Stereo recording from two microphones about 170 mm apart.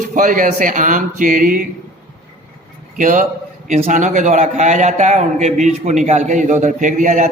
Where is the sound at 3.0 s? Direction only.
50° right (ahead or behind).